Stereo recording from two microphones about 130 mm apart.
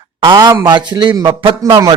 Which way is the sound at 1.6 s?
30° right (ahead or behind).